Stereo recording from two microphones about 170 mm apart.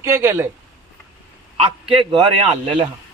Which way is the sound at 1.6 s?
30° right (ahead or behind).